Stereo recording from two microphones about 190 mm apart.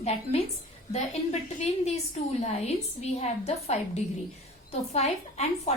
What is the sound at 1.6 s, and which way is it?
A woman's voice, 35° left (ahead or behind).